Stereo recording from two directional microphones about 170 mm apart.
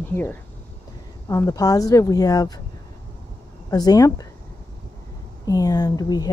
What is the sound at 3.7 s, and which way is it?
Speech, 20° left (ahead or behind).